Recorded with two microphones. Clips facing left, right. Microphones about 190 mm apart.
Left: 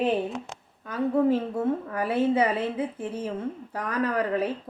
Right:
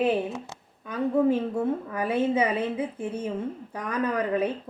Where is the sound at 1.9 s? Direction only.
20° right (ahead or behind).